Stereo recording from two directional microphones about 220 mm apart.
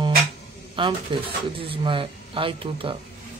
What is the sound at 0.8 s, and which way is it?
Speech, 20° right (ahead or behind).